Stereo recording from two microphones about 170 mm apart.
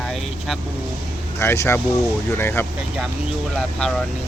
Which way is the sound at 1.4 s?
15° left (ahead or behind).